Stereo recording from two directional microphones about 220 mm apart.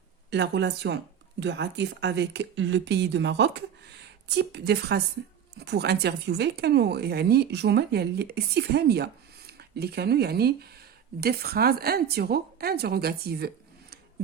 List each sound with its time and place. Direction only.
0.3 s speech: 50° right (ahead or behind)